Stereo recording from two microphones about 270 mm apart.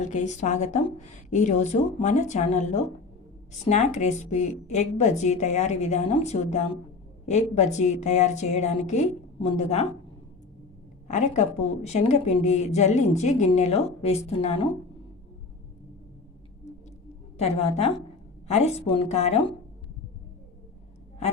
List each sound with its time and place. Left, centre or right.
0.0 s a woman's voice: left
11.1 s a woman's voice: left
17.3 s a woman's voice: left